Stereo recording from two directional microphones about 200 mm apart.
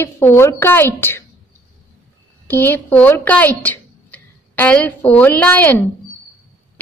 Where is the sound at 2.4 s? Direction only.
10° left (ahead or behind).